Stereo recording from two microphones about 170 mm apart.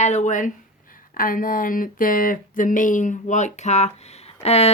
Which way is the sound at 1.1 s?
55° left (ahead or behind).